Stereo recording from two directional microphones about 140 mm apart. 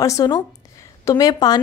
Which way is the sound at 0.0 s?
25° left (ahead or behind).